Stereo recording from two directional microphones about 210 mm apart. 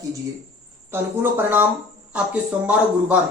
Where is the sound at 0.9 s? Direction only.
10° right (ahead or behind).